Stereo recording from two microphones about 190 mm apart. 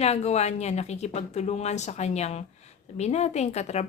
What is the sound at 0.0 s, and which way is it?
Speech, 35° left (ahead or behind).